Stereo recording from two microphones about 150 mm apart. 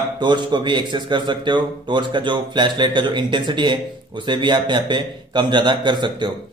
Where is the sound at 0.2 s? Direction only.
30° right (ahead or behind).